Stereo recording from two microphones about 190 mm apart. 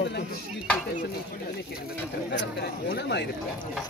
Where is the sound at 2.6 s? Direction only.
60° left (ahead or behind).